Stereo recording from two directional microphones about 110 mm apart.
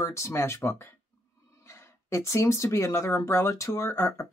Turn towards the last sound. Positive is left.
turn(degrees=25)  # may be behind; listen again after turning